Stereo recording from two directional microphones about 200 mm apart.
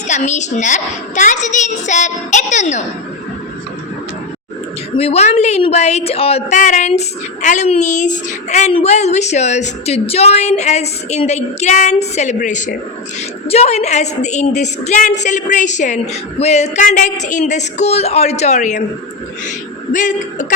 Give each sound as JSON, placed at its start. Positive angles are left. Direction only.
{"t": 0.1, "sound": "a woman's voice", "side_deg": 35}
{"t": 4.9, "sound": "a woman's voice", "side_deg": 30}
{"t": 19.9, "sound": "a woman's voice", "side_deg": 40}